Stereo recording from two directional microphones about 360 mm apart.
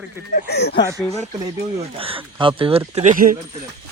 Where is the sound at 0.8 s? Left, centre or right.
Centre.